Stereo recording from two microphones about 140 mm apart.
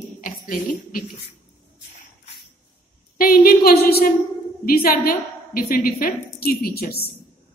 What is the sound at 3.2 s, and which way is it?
A woman's voice, 90° left.